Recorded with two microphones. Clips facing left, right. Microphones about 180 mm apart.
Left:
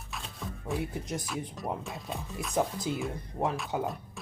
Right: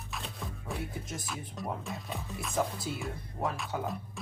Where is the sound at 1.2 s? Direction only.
Centre (ahead or behind).